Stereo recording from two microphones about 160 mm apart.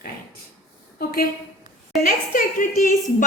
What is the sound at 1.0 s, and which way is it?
Speech, 70° left (ahead or behind).